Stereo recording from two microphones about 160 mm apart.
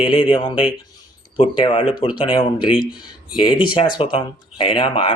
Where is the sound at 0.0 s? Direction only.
5° right (ahead or behind).